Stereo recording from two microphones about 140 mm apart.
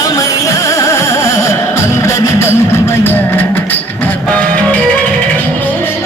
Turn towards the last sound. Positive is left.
turn(degrees=10)  # may be behind; listen again after turning